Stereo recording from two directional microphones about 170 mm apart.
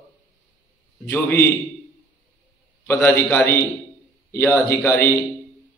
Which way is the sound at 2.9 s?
15° left (ahead or behind).